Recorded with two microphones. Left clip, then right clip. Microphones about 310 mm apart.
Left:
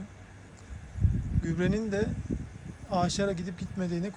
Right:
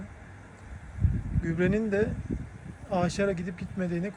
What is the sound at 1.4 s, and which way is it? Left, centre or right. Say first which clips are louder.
Speech: right 3 dB; centre.